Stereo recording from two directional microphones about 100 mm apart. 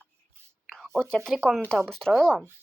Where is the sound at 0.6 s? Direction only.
5° left (ahead or behind).